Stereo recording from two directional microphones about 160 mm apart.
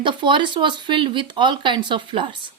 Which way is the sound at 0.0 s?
30° right (ahead or behind).